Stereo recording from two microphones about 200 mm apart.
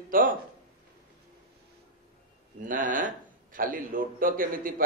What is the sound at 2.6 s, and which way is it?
A man's voice, 40° right (ahead or behind).